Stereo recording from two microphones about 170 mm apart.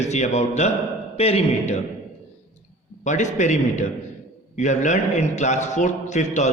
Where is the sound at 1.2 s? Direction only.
35° left (ahead or behind).